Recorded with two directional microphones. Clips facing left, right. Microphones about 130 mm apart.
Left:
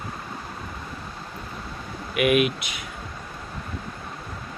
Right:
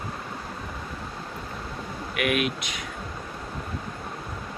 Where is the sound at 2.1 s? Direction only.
5° left (ahead or behind).